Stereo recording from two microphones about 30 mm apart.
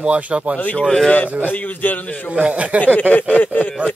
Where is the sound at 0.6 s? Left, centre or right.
Left.